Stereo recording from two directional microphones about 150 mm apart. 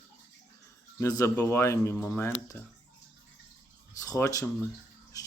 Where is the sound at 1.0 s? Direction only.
20° left (ahead or behind).